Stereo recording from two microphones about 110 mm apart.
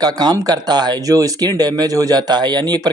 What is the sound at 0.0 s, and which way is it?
A man's voice, 35° right (ahead or behind).